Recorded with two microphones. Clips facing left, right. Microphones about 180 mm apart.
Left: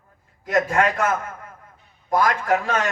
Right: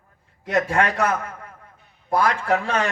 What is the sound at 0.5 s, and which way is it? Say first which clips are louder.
A man's voice: left 1 dB; 35° right (ahead or behind).